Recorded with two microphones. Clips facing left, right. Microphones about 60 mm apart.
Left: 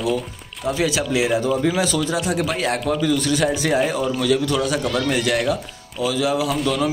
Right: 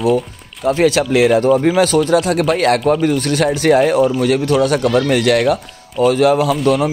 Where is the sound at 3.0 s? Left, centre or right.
Right.